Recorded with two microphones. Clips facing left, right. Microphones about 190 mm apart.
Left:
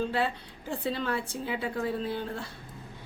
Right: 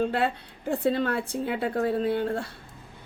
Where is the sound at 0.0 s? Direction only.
55° right (ahead or behind).